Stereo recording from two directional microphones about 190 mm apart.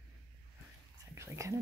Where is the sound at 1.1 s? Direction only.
15° right (ahead or behind).